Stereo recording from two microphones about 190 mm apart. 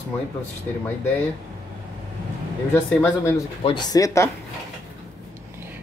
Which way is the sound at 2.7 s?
10° left (ahead or behind).